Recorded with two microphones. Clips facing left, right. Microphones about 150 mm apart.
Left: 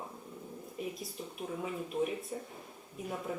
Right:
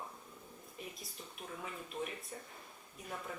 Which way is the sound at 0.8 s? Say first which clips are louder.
Left 9 dB; 5° left (ahead or behind).